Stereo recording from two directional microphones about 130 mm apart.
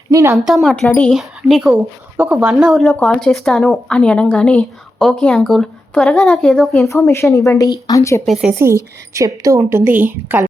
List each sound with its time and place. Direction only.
0.1 s speech: 25° right (ahead or behind)
0.3 s a woman's voice: centre (ahead or behind)
1.7 s speech: 15° right (ahead or behind)
2.8 s a woman's voice: 10° left (ahead or behind)
7.1 s speech: 20° left (ahead or behind)
8.6 s a woman's voice: 20° right (ahead or behind)